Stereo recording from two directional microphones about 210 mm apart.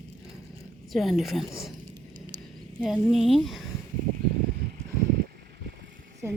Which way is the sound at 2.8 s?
Centre (ahead or behind).